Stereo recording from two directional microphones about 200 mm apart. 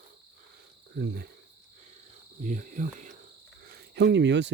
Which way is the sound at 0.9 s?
50° right (ahead or behind).